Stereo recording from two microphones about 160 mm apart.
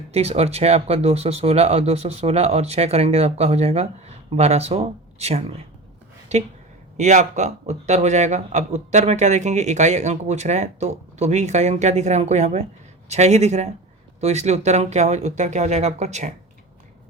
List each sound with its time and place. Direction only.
0.1 s a man's voice: 40° right (ahead or behind)